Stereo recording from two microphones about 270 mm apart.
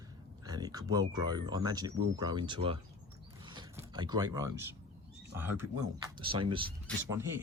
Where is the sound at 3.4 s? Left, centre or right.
Centre.